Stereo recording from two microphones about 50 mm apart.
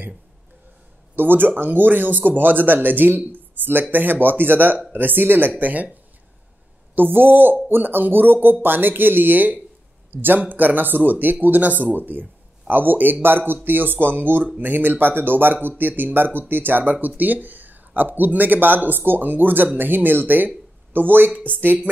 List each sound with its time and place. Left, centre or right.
1.1 s speech: right
7.0 s speech: right